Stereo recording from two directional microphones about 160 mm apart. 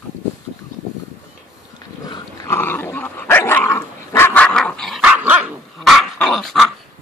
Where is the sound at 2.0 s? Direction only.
25° left (ahead or behind).